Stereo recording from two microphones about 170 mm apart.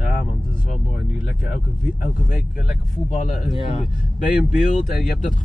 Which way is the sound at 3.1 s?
50° left (ahead or behind).